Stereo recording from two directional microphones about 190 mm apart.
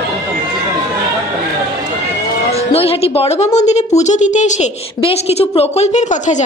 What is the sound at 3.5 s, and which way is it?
A woman's voice, 35° left (ahead or behind).